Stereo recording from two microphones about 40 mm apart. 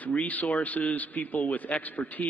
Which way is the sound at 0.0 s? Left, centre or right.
Left.